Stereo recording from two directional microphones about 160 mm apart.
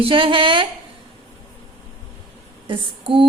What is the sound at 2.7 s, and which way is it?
Speech, 30° right (ahead or behind).